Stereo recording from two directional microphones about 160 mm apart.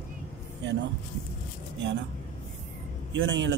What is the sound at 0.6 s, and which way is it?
Speech, 90° right.